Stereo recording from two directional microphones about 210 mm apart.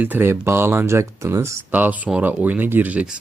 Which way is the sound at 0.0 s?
10° right (ahead or behind).